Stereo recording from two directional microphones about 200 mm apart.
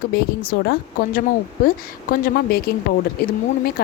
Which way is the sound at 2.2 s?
50° left (ahead or behind).